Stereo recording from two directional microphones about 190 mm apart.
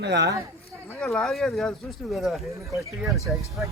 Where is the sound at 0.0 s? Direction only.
65° right (ahead or behind).